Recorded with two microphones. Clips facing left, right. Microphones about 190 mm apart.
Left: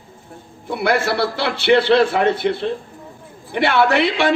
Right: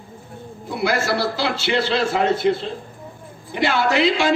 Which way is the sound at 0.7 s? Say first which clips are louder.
Left 2 dB; 60° left (ahead or behind).